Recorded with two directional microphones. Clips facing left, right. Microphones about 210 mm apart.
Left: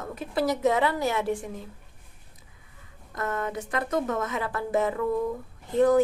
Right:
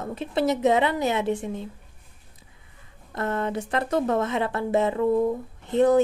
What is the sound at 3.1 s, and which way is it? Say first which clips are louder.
A woman's voice: right 4 dB; 30° right (ahead or behind).